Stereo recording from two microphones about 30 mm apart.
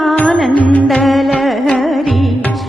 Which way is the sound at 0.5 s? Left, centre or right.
Left.